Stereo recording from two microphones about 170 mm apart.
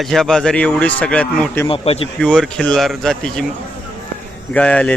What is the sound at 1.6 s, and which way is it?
Speech, 35° left (ahead or behind).